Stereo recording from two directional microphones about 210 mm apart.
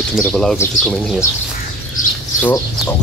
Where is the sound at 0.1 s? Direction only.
5° left (ahead or behind).